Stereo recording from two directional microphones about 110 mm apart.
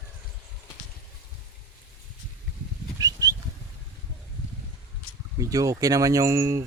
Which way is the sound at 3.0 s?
35° right (ahead or behind).